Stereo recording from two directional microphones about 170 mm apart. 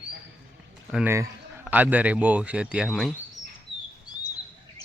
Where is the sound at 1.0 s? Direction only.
15° right (ahead or behind).